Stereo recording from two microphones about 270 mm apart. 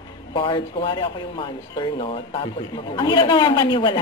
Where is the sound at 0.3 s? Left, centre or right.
Centre.